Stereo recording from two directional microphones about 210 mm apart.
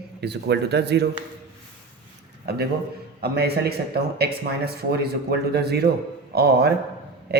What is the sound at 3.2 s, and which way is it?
Speech, 50° right (ahead or behind).